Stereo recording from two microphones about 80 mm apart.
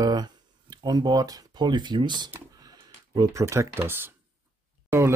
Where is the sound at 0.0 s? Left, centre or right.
Right.